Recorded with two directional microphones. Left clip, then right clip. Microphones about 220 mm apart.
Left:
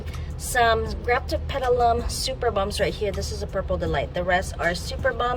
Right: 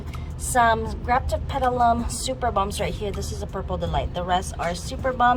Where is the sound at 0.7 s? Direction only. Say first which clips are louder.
Even; 10° left (ahead or behind).